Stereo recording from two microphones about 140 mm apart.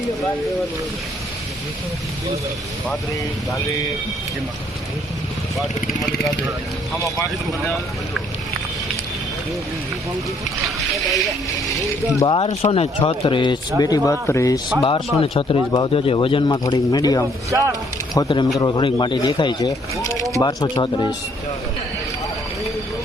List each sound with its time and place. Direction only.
3.5 s speech: 25° left (ahead or behind)
12.2 s speech: 40° left (ahead or behind)
12.5 s speech: 50° left (ahead or behind); by 14.6 s 20° left (ahead or behind)
14.8 s speech: 40° left (ahead or behind)
17.5 s speech: 25° right (ahead or behind)
18.1 s speech: 30° left (ahead or behind)